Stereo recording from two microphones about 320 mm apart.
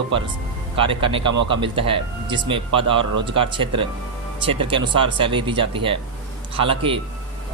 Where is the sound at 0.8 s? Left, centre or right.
Centre.